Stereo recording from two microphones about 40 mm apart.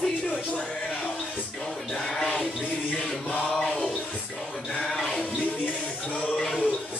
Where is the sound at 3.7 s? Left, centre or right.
Centre.